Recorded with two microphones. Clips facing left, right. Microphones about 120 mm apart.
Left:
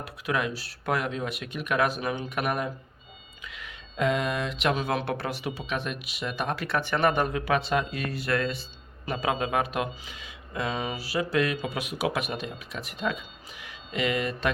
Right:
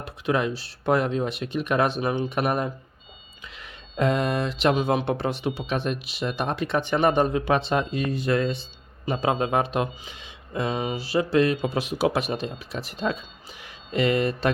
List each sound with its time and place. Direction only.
0.0 s speech: 30° right (ahead or behind)
4.7 s speech: 20° right (ahead or behind)